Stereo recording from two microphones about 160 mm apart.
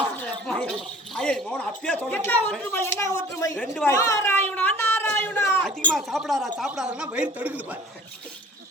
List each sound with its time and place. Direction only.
0.4 s speech: 5° left (ahead or behind)
3.6 s speech: 5° left (ahead or behind)
3.9 s speech: 20° left (ahead or behind)
5.9 s a man's voice: centre (ahead or behind)